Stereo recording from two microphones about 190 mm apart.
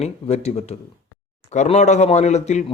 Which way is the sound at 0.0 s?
35° left (ahead or behind).